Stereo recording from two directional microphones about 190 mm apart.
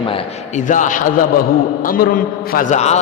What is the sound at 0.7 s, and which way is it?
A man's voice, 45° left (ahead or behind).